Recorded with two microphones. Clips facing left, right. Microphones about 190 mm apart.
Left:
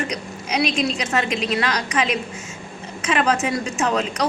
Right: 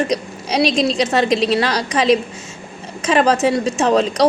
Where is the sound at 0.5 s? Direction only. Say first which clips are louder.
Right 5 dB; 35° right (ahead or behind).